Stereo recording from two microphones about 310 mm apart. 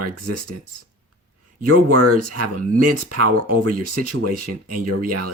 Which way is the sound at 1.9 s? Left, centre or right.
Right.